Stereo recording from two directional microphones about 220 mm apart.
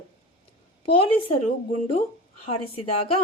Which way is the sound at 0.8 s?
25° left (ahead or behind).